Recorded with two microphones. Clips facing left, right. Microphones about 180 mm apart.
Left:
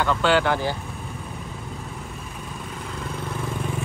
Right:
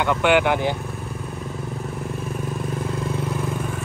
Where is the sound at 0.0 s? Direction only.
15° right (ahead or behind).